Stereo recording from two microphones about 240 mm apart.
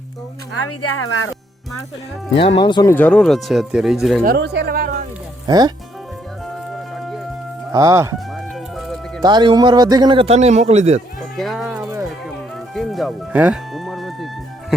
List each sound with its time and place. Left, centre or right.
0.5 s speech: left
2.4 s speech: centre
2.9 s speech: centre
4.2 s speech: right
5.5 s speech: centre
7.7 s speech: centre
8.7 s music: centre
9.2 s a man's voice: centre
11.2 s sheep: centre
12.7 s music: centre